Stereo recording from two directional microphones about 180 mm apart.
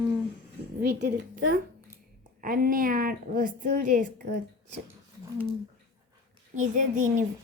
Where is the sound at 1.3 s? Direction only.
50° right (ahead or behind).